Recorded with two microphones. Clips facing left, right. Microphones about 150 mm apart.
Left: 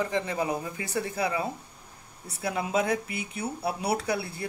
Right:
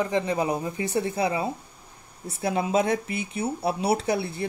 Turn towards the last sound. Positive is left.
turn(degrees=-25)  # may be behind; listen again after turning